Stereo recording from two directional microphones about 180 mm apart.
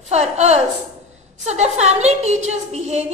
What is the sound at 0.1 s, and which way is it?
A woman's voice, 35° right (ahead or behind).